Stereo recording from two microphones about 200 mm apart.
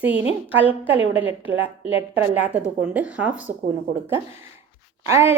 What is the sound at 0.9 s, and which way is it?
Speech, 70° right (ahead or behind).